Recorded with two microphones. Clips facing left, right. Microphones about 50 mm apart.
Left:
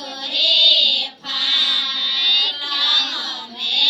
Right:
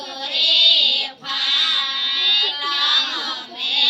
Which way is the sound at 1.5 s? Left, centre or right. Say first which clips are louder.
Left 1 dB; right.